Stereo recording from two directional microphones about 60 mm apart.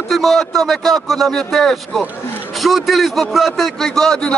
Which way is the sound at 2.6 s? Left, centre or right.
Centre.